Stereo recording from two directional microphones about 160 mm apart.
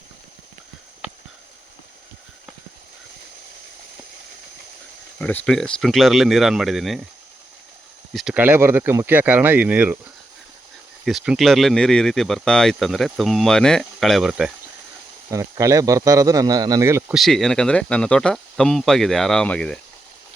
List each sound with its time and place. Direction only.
5.2 s speech: 5° left (ahead or behind)
8.1 s speech: 5° right (ahead or behind)
11.0 s speech: 5° right (ahead or behind)
15.3 s speech: 20° right (ahead or behind)
17.2 s speech: centre (ahead or behind)